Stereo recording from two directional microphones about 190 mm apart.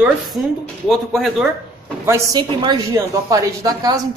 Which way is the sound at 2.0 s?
15° right (ahead or behind).